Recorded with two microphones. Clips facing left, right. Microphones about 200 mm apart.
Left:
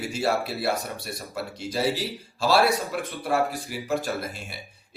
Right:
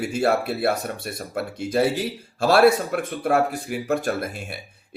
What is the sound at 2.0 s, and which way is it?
Speech, 55° right (ahead or behind).